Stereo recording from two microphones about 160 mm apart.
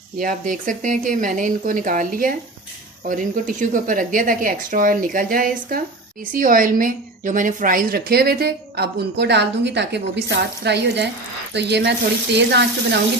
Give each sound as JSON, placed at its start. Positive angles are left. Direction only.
{"t": 0.2, "sound": "a woman's voice", "side_deg": -55}